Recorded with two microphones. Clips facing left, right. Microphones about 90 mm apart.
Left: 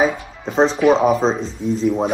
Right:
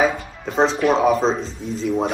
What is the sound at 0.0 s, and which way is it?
Speech, centre (ahead or behind).